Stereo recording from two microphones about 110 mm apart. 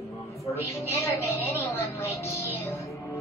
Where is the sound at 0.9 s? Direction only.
25° left (ahead or behind).